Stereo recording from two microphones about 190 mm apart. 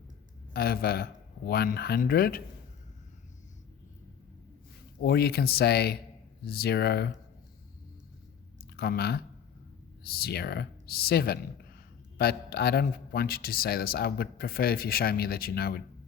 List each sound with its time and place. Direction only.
0.5 s a man's voice: 55° left (ahead or behind)
4.9 s speech: 60° left (ahead or behind)
8.7 s a man's voice: 55° left (ahead or behind)